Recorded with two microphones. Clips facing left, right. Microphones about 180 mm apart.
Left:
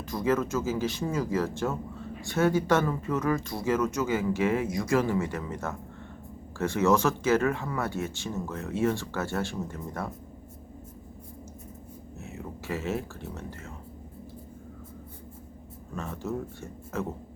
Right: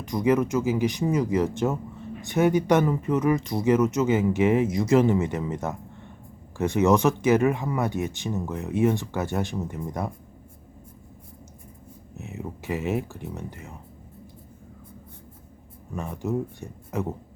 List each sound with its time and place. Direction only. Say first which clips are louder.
0.0 s speech: right 5 dB; 20° right (ahead or behind)
12.1 s speech: right 5 dB; 20° right (ahead or behind)
16.0 s speech: right 5 dB; 15° right (ahead or behind)